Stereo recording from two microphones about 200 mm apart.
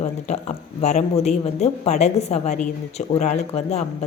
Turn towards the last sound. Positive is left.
turn(degrees=35)  # may be behind; listen again after turning